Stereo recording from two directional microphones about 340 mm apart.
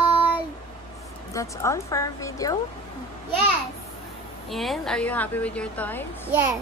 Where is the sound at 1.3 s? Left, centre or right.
Centre.